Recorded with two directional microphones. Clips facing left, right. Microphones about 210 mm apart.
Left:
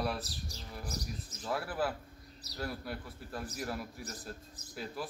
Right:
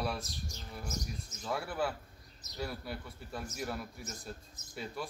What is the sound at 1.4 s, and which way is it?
Speech, centre (ahead or behind).